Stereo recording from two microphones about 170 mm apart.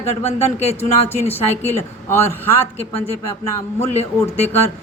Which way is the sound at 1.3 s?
15° left (ahead or behind).